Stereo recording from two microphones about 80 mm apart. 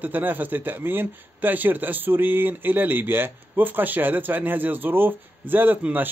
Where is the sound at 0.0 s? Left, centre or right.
Right.